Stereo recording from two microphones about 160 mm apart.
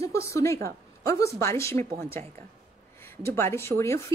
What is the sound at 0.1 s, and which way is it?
A woman's voice, 20° left (ahead or behind).